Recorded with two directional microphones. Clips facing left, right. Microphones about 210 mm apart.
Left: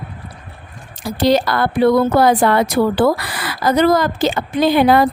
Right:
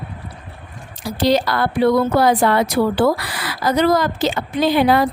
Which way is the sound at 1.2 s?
50° left (ahead or behind).